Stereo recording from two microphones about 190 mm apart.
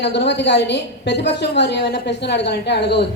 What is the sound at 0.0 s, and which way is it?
A woman's voice, 65° left (ahead or behind).